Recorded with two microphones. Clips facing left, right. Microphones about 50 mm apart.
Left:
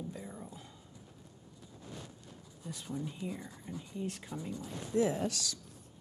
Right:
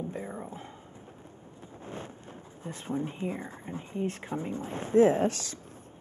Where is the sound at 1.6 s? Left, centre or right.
Right.